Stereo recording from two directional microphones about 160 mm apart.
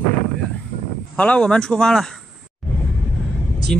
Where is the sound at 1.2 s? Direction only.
5° left (ahead or behind).